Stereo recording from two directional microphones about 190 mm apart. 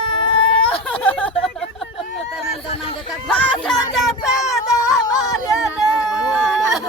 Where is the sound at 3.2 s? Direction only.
5° left (ahead or behind).